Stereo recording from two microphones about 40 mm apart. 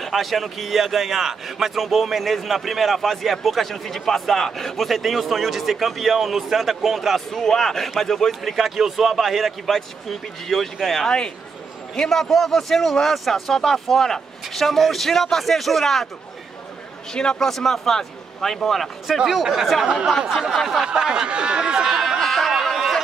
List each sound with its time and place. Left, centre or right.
0.0 s a man's voice: centre
11.1 s a man's voice: left
11.9 s speech: centre
17.1 s a man's voice: centre
17.5 s speech: centre
19.2 s a man's voice: centre
20.8 s speech: centre
22.2 s a sound: centre